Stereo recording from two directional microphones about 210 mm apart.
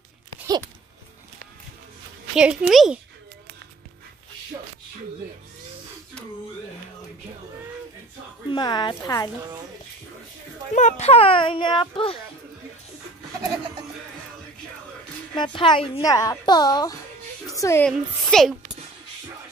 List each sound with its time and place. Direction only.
2.3 s a woman's voice: 5° right (ahead or behind)
8.5 s a woman's voice: 20° left (ahead or behind)
10.7 s a woman's voice: 35° left (ahead or behind)
15.3 s a woman's voice: 20° left (ahead or behind)
17.9 s a woman's voice: centre (ahead or behind)